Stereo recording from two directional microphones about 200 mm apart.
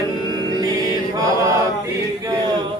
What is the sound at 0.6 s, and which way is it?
Music, 20° right (ahead or behind).